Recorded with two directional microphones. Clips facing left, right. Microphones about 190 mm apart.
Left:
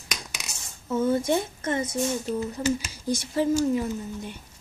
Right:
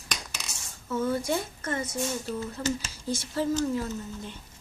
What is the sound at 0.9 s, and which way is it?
Speech, 20° left (ahead or behind).